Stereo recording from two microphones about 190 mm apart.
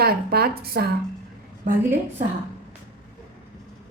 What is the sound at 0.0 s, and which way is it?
Speech, 55° right (ahead or behind).